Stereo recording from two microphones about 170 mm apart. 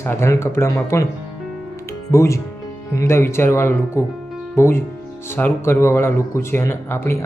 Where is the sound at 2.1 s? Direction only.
15° left (ahead or behind).